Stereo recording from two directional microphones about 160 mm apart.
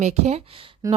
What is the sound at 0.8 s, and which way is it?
Speech, 20° right (ahead or behind).